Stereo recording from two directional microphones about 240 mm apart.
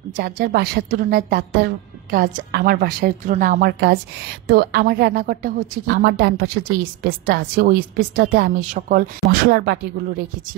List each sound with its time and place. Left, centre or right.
0.1 s a woman's voice: right